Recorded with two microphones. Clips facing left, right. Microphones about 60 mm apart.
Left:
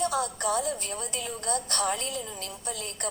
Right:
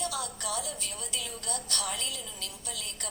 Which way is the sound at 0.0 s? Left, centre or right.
Left.